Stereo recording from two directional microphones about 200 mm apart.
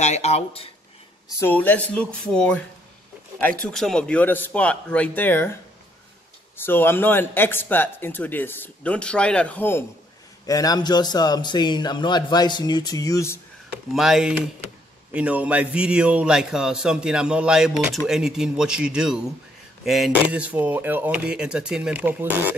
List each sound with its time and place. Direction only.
0.0 s speech: 35° left (ahead or behind)
1.3 s a man's voice: 10° left (ahead or behind)
13.9 s a man's voice: centre (ahead or behind)